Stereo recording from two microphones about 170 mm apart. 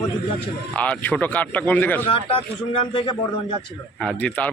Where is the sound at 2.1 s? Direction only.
30° left (ahead or behind).